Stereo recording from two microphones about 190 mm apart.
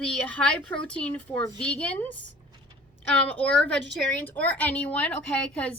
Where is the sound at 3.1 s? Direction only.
5° left (ahead or behind).